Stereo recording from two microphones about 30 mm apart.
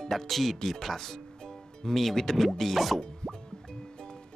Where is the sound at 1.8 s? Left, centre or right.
Centre.